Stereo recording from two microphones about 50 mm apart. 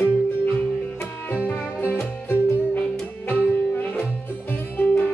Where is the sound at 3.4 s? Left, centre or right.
Left.